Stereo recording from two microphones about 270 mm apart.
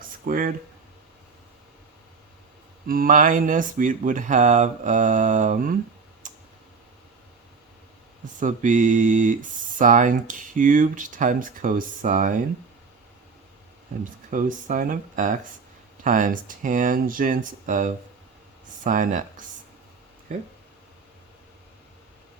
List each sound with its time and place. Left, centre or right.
0.3 s speech: right
2.8 s speech: right
6.2 s clicking: right
8.4 s speech: right
14.0 s speech: right